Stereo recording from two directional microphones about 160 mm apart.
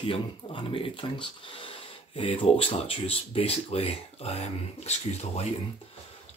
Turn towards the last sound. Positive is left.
turn(degrees=40)  # may be behind; listen again after turning